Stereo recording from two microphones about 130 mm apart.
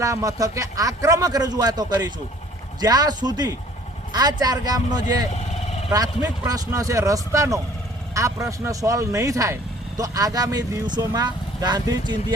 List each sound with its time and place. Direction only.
0.0 s speech: 25° right (ahead or behind)